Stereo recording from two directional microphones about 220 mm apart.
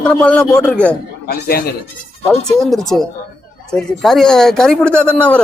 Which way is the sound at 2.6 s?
Centre (ahead or behind).